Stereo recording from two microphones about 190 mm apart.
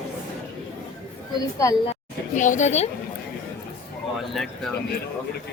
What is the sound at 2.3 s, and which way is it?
Speech, 40° left (ahead or behind).